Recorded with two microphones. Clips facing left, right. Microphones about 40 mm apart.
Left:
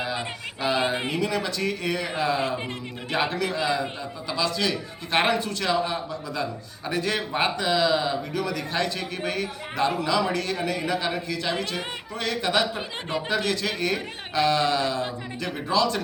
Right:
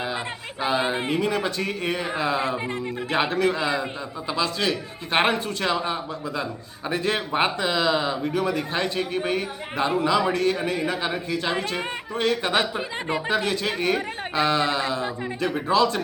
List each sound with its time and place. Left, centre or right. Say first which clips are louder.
0.6 s a man's voice: right 1 dB; right
5.7 s a man's voice: even; right